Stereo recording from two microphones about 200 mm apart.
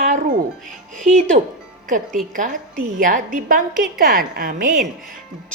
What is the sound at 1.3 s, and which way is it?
A woman's voice, 40° right (ahead or behind).